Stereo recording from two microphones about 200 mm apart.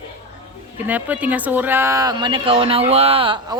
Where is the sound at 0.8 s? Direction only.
10° right (ahead or behind).